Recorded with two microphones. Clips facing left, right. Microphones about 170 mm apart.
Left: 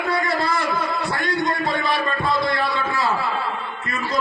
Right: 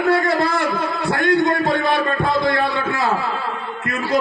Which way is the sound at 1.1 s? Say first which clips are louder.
Right 10 dB; 60° right (ahead or behind).